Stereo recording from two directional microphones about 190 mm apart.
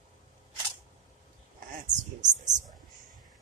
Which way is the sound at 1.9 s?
40° right (ahead or behind).